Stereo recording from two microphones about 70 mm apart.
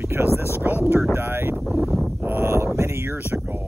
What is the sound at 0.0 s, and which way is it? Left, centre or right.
Speech, right.